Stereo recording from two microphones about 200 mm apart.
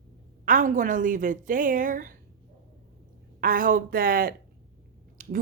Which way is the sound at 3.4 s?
45° right (ahead or behind).